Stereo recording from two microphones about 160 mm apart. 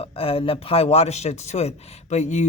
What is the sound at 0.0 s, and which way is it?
A man's voice, 35° left (ahead or behind).